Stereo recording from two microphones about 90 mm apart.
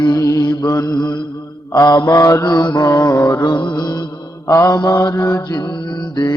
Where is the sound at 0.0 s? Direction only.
40° left (ahead or behind).